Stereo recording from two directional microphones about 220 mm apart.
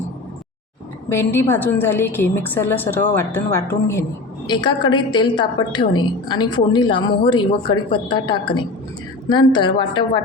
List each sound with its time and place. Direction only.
1.1 s a woman's voice: 10° left (ahead or behind)